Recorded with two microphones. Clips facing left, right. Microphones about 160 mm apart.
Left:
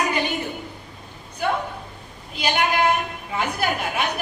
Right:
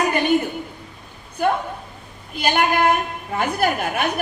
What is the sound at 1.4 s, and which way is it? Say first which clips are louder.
Speech: right 4 dB; 50° right (ahead or behind).